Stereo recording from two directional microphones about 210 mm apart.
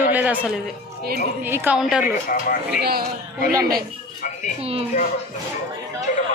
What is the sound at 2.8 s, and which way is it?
Speech, 45° right (ahead or behind).